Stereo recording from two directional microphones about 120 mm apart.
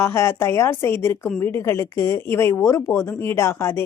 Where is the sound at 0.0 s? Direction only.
20° left (ahead or behind).